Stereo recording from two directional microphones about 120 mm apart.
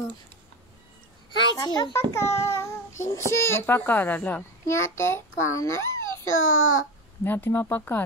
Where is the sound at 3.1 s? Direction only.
25° left (ahead or behind).